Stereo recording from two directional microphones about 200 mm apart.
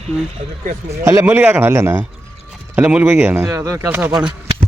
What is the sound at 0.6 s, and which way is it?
Speech, 40° right (ahead or behind).